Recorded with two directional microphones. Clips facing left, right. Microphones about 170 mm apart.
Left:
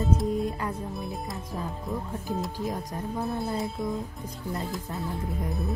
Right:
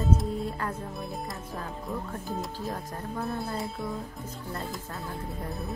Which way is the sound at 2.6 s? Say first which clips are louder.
Left 3 dB; 15° left (ahead or behind).